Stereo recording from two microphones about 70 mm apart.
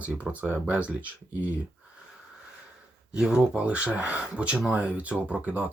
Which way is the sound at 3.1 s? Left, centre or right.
Centre.